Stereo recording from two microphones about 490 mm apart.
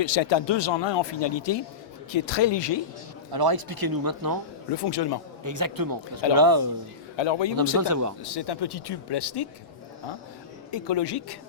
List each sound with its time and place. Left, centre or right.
0.0 s speech: left
3.3 s speech: right
4.7 s speech: left
5.4 s speech: right
7.2 s speech: left
7.8 s speech: right
8.2 s speech: left
10.7 s speech: left